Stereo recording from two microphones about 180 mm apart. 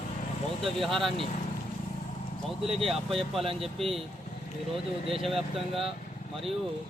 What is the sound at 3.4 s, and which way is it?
Speech, 30° right (ahead or behind).